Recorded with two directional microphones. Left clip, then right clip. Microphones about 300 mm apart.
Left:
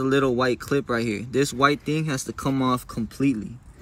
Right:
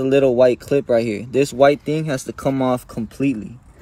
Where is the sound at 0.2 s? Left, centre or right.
Centre.